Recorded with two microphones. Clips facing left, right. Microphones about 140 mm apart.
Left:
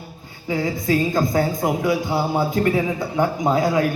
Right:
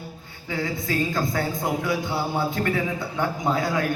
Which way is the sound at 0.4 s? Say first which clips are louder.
Left 6 dB; 20° left (ahead or behind).